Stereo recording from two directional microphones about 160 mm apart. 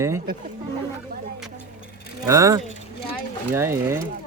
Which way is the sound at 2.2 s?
20° right (ahead or behind).